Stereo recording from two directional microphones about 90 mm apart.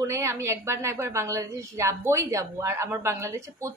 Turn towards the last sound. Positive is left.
turn(degrees=-30)  # may be behind; listen again after turning